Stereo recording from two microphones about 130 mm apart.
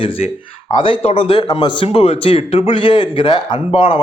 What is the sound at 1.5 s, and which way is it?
A man's voice, 35° left (ahead or behind).